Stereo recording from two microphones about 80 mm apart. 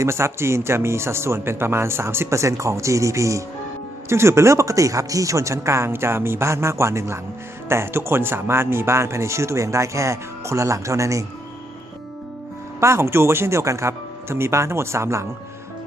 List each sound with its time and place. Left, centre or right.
0.0 s speech: right
12.8 s speech: right